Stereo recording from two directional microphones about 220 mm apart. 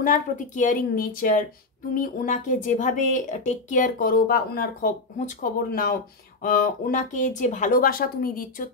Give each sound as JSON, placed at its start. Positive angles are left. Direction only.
{"t": 0.0, "sound": "speech", "side_deg": 35}